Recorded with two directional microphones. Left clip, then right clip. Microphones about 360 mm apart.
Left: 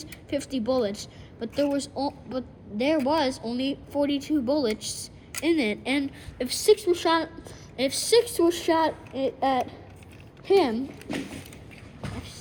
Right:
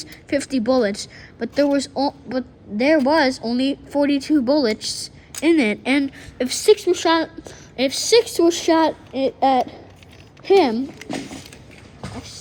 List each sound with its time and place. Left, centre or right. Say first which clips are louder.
0.1 s a woman's voice: right 8 dB; right